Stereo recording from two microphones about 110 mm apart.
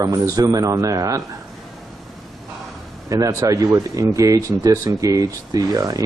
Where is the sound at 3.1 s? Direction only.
30° right (ahead or behind).